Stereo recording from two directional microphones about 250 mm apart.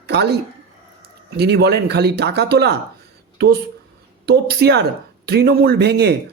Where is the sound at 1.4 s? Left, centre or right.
Right.